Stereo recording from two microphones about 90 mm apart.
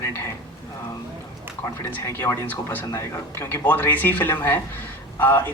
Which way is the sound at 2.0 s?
25° left (ahead or behind).